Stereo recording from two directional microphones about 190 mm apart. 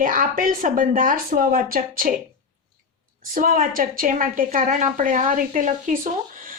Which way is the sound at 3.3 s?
45° right (ahead or behind).